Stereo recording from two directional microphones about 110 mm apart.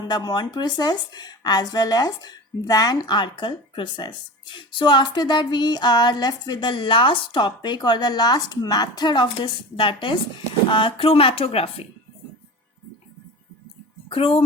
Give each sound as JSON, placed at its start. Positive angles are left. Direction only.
{"t": 0.0, "sound": "a woman's voice", "side_deg": 40}
{"t": 14.1, "sound": "a woman's voice", "side_deg": 55}